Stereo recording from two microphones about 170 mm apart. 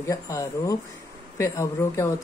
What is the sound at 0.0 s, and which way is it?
Speech, 20° left (ahead or behind).